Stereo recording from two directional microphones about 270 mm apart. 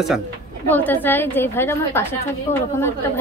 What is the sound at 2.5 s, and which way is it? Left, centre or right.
Speech, left.